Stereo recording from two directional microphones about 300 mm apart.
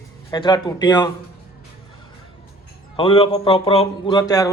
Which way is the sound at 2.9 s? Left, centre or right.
Centre.